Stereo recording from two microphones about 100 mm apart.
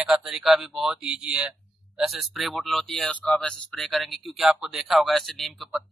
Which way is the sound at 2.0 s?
Centre (ahead or behind).